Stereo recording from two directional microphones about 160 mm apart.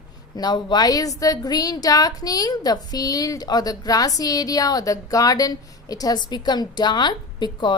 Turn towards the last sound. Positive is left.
turn(degrees=30)  # may be behind; listen again after turning